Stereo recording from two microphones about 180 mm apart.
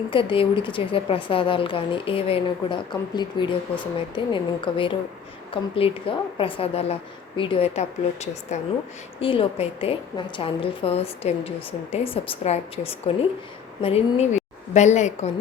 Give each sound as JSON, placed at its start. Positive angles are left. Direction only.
{"t": 0.1, "sound": "a woman's voice", "side_deg": 30}